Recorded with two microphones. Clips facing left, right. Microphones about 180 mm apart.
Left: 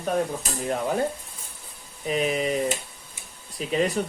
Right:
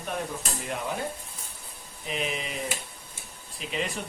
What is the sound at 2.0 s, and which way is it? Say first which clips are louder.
Speech: left 8 dB; 45° left (ahead or behind).